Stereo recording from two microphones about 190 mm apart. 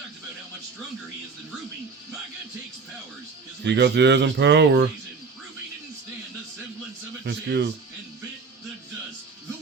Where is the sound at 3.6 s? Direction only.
65° right (ahead or behind).